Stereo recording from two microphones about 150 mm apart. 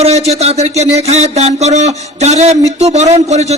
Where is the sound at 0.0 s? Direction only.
45° right (ahead or behind).